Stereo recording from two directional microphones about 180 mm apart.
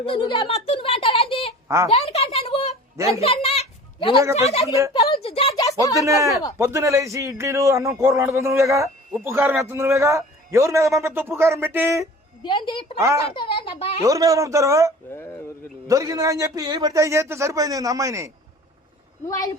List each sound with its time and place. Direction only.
0.0 s speech: 30° left (ahead or behind)
1.6 s speech: 15° right (ahead or behind)
1.9 s a sound: 35° left (ahead or behind)
4.4 s speech: 35° left (ahead or behind)
5.2 s a sound: 30° left (ahead or behind)
5.6 s a sound: 20° left (ahead or behind)
6.0 s a man's voice: 15° right (ahead or behind)
12.4 s a woman's voice: 25° left (ahead or behind)
13.3 s a sound: 25° left (ahead or behind)
14.0 s a man's voice: 20° right (ahead or behind)
15.1 s speech: 15° left (ahead or behind)
15.9 s a man's voice: 20° right (ahead or behind)